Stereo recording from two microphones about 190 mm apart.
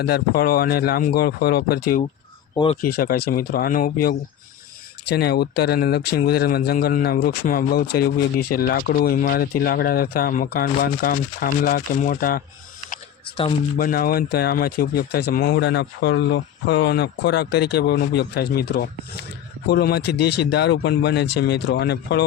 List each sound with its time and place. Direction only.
0.0 s speech: 55° left (ahead or behind)
13.7 s speech: 50° left (ahead or behind)